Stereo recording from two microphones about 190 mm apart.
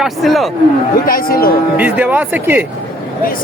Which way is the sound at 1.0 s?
50° left (ahead or behind).